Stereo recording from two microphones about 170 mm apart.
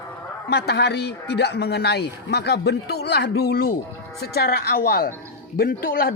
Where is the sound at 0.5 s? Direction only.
70° left (ahead or behind).